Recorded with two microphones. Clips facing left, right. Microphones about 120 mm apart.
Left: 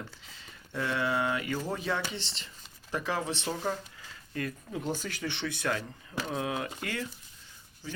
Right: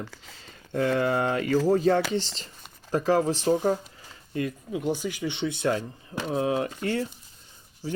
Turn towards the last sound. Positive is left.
turn(degrees=-35)  # may be behind; listen again after turning